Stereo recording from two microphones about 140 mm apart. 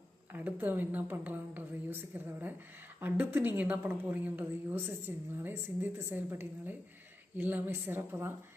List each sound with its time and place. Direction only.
0.3 s a woman's voice: 10° right (ahead or behind)